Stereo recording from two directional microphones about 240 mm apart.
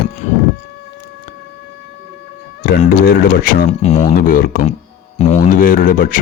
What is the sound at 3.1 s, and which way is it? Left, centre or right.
Speech, left.